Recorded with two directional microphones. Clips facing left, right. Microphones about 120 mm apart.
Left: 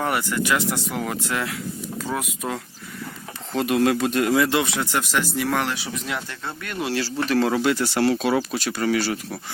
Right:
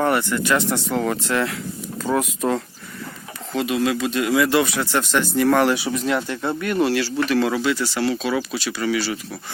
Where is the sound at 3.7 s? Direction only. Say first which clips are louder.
Left 2 dB; 50° left (ahead or behind).